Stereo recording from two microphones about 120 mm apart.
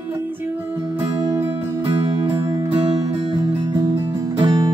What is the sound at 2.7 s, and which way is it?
Music, 30° right (ahead or behind).